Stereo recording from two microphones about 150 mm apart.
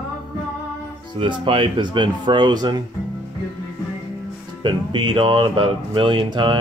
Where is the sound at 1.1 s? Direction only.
35° right (ahead or behind).